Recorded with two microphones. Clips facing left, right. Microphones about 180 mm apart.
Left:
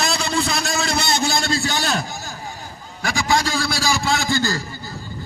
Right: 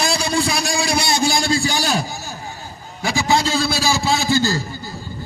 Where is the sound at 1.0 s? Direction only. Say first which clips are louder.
Right 3 dB; 20° left (ahead or behind).